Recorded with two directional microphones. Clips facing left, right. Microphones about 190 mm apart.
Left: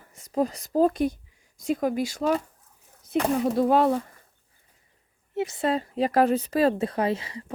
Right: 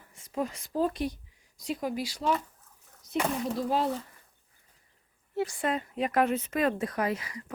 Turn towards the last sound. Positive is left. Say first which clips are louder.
# left 4 dB
turn(degrees=30)  # may be behind; listen again after turning